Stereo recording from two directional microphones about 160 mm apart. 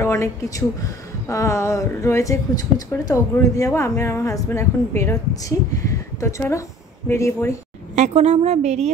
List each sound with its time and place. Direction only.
0.0 s speech: 20° left (ahead or behind)
7.9 s a woman's voice: 45° right (ahead or behind)